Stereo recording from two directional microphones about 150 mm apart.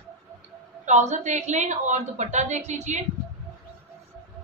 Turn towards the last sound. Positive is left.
turn(degrees=-50)  # may be behind; listen again after turning